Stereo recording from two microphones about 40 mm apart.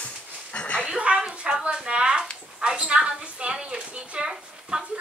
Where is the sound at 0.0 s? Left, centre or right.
Left.